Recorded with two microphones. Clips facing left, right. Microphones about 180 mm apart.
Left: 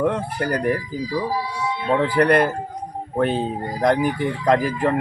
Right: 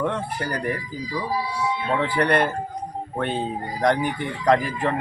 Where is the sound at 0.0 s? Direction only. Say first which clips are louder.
Left 4 dB; 35° left (ahead or behind).